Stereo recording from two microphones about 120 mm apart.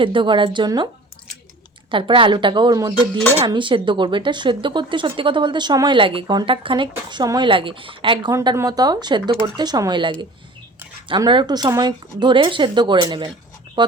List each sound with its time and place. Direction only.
0.0 s speech: 45° right (ahead or behind)
1.9 s speech: 45° right (ahead or behind)
8.5 s speech: 30° right (ahead or behind)
11.3 s speech: 40° right (ahead or behind)